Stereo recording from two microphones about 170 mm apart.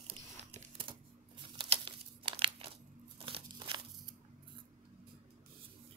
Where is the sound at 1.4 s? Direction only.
30° right (ahead or behind).